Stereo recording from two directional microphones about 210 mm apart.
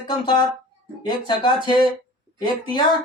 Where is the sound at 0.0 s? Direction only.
20° left (ahead or behind).